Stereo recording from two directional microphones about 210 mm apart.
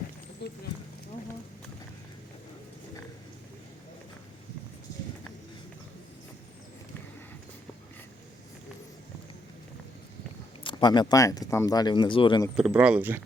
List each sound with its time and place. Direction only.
0.4 s speech: 50° left (ahead or behind)
10.6 s speech: 20° left (ahead or behind)
12.5 s speech: 5° right (ahead or behind)